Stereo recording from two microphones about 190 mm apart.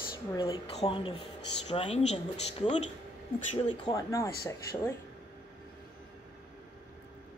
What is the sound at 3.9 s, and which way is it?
Speech, 15° left (ahead or behind).